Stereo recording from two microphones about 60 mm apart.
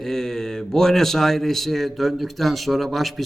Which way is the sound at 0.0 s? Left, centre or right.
Centre.